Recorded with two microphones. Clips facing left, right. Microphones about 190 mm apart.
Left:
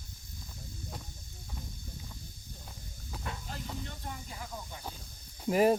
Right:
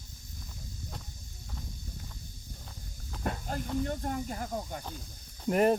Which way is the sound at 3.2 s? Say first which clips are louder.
Right 8 dB; 50° right (ahead or behind).